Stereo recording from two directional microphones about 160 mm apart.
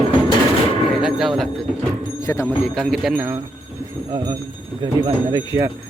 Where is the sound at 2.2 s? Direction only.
20° left (ahead or behind).